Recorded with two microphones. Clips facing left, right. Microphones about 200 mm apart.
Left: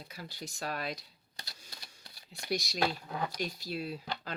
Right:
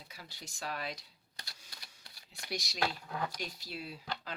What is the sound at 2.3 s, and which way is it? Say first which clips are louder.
Speech: left 6 dB; 35° left (ahead or behind).